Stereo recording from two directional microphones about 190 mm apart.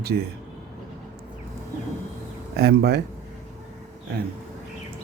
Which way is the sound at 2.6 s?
55° right (ahead or behind).